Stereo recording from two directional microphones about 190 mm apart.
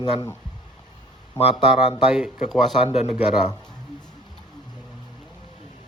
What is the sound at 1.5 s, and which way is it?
A man's voice, centre (ahead or behind).